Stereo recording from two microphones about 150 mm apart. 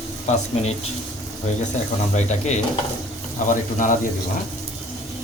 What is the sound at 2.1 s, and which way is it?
Speech, 50° left (ahead or behind).